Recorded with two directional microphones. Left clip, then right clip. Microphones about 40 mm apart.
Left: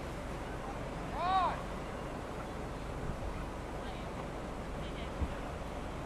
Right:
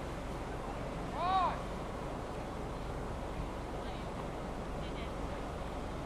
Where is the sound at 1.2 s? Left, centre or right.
Centre.